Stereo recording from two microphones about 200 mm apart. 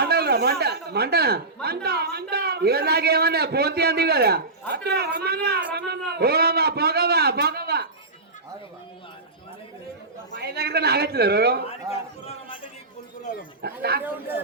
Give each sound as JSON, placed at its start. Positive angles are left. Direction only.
{"t": 0.0, "sound": "a sound", "side_deg": -55}
{"t": 1.6, "sound": "a man's voice", "side_deg": -50}
{"t": 10.3, "sound": "a man's voice", "side_deg": -55}
{"t": 11.9, "sound": "a sound", "side_deg": 30}
{"t": 13.6, "sound": "a man's voice", "side_deg": -50}
{"t": 14.0, "sound": "speech", "side_deg": -10}